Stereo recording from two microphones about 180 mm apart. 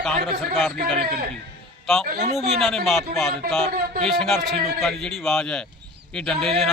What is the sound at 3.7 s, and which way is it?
Speech, 55° right (ahead or behind).